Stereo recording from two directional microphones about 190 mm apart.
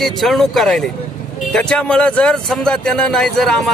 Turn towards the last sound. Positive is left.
turn(degrees=5)  # may be behind; listen again after turning